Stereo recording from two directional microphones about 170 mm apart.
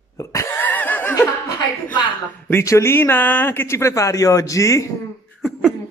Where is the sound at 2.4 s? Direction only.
15° left (ahead or behind).